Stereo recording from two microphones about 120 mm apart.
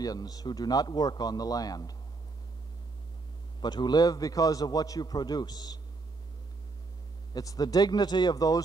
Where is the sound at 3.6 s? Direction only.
35° left (ahead or behind).